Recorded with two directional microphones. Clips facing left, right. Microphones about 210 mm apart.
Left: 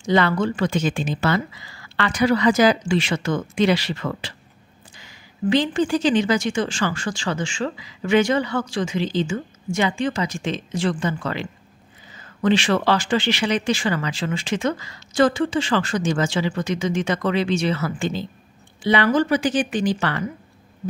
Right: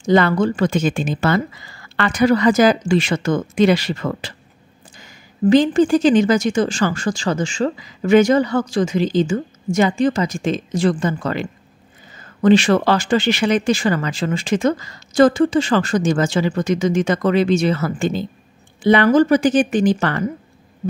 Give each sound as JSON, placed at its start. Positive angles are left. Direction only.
{"t": 0.1, "sound": "a woman's voice", "side_deg": -45}